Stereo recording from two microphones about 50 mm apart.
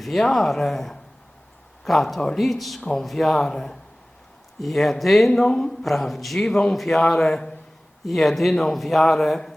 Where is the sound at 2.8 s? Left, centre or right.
Centre.